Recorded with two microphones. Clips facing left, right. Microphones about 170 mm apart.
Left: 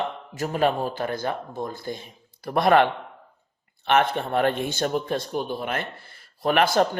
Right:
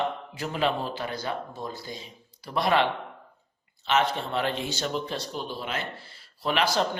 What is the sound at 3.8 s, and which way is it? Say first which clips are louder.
Speech: left 4 dB; 55° left (ahead or behind).